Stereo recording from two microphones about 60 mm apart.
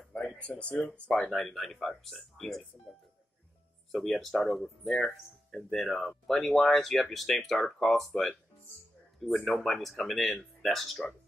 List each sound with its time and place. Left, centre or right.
0.4 s speech: centre
1.3 s speech: centre
3.9 s speech: centre